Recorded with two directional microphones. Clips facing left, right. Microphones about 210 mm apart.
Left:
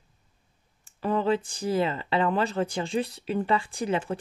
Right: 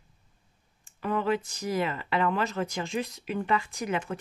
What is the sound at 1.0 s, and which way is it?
Speech, 30° left (ahead or behind).